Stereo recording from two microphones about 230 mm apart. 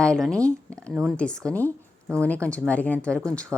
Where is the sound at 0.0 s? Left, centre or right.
Centre.